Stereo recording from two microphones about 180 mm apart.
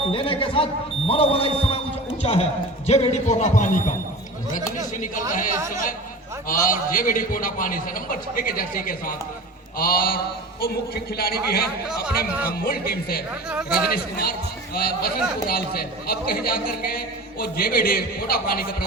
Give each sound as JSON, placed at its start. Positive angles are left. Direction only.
{"t": 0.1, "sound": "a man's voice", "side_deg": 30}
{"t": 5.5, "sound": "speech", "side_deg": -15}
{"t": 6.5, "sound": "a man's voice", "side_deg": 50}
{"t": 13.5, "sound": "a man's voice", "side_deg": -5}
{"t": 13.9, "sound": "speech", "side_deg": 55}